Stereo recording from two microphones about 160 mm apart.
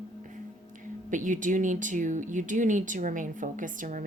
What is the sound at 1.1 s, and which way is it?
Speech, 55° right (ahead or behind).